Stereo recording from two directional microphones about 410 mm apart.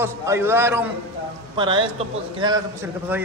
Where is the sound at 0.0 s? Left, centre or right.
Centre.